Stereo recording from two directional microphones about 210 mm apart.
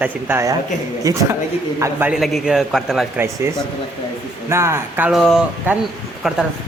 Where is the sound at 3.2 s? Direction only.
15° right (ahead or behind).